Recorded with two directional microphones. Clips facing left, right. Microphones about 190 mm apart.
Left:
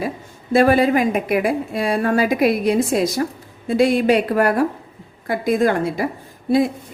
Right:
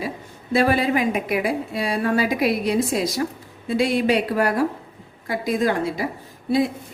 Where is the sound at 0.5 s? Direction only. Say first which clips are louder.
Left 5 dB; 50° left (ahead or behind).